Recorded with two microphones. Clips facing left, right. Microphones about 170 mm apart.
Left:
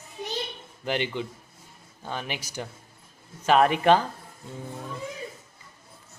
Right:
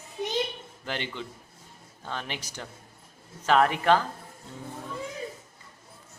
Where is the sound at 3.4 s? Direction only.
20° left (ahead or behind).